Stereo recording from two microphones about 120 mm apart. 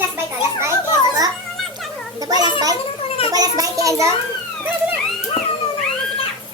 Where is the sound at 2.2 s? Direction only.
35° right (ahead or behind).